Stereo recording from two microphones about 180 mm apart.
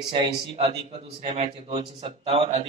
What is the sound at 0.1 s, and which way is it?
Speech, 30° right (ahead or behind).